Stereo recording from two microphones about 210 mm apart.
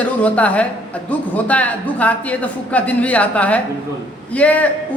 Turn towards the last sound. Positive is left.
turn(degrees=5)  # may be behind; listen again after turning